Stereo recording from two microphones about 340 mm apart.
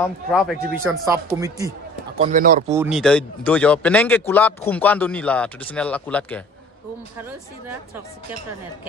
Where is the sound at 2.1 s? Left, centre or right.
Right.